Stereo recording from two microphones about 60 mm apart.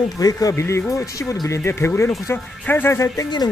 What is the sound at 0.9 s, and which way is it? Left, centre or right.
Speech, left.